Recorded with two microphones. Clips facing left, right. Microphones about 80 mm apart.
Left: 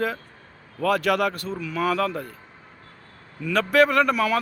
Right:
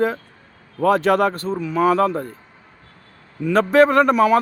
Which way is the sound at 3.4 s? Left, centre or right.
Right.